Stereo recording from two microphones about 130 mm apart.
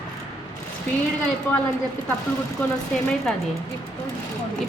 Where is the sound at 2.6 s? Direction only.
15° left (ahead or behind).